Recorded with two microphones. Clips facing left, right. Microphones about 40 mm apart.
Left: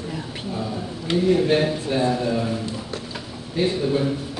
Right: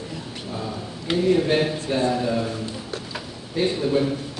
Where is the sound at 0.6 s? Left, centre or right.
Centre.